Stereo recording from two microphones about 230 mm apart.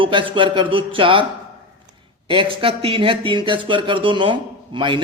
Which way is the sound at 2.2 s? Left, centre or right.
Right.